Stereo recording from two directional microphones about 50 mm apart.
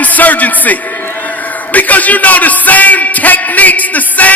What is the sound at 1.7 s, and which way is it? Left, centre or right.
A man's voice, left.